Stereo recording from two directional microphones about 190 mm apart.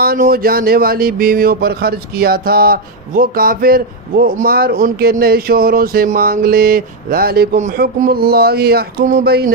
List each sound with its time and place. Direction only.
0.0 s speech: 50° right (ahead or behind)